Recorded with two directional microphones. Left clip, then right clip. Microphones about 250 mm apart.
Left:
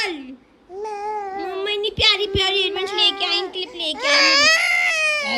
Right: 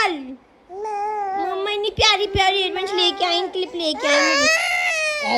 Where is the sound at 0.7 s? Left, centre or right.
Centre.